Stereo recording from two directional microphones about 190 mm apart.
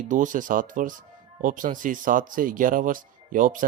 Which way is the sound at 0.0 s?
45° right (ahead or behind).